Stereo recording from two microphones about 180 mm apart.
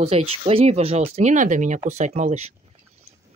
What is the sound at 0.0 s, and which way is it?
Speech, 30° right (ahead or behind).